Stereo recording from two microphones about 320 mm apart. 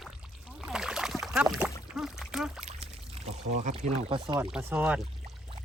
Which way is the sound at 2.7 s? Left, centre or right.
Centre.